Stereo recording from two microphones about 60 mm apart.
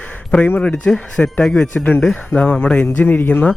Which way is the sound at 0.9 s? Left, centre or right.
Centre.